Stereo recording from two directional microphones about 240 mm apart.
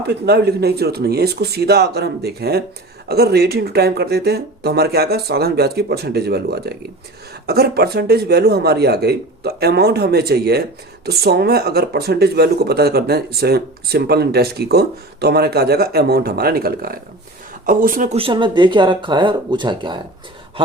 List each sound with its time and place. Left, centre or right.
0.1 s speech: right
18.2 s speech: right